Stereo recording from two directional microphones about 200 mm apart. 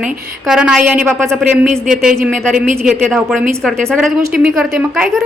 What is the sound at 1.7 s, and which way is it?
Speech, 40° right (ahead or behind).